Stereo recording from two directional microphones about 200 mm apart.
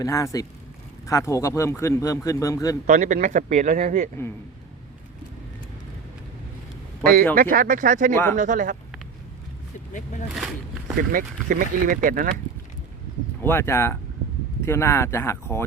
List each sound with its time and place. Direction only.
0.0 s speech: 15° left (ahead or behind)
2.8 s speech: 40° right (ahead or behind)
7.0 s speech: 45° right (ahead or behind)
8.1 s speech: 10° left (ahead or behind)
8.4 s speech: 40° right (ahead or behind)
10.9 s speech: 45° right (ahead or behind)
13.4 s speech: 10° left (ahead or behind)